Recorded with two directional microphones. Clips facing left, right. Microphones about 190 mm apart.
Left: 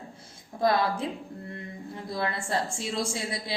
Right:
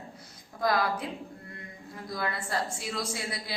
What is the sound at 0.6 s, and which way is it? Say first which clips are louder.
A woman's voice: left 3 dB; 25° left (ahead or behind).